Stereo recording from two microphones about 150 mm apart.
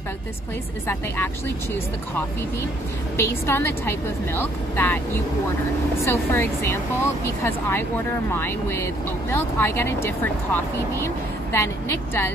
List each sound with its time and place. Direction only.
0.8 s a woman's voice: 15° left (ahead or behind)
3.2 s a woman's voice: 15° left (ahead or behind)